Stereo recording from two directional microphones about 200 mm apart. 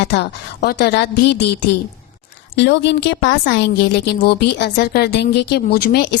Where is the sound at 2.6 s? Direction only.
60° left (ahead or behind).